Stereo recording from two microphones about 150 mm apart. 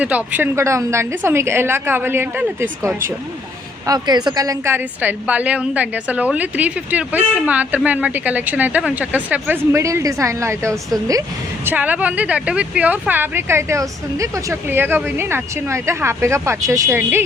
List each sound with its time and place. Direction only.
0.0 s speech: 10° right (ahead or behind)
11.6 s speech: 10° right (ahead or behind)